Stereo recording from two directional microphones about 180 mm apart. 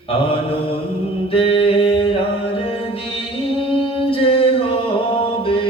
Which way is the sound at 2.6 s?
30° left (ahead or behind).